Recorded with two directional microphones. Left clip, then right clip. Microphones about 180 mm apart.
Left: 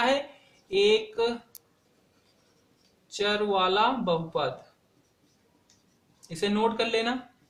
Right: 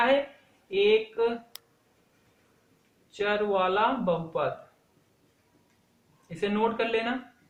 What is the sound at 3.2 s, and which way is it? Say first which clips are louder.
Speech: left 1 dB; 35° left (ahead or behind).